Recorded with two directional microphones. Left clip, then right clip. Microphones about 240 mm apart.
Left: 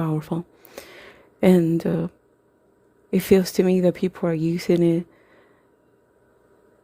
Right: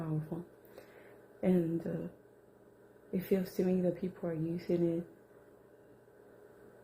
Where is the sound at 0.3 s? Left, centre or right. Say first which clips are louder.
Left 14 dB; left.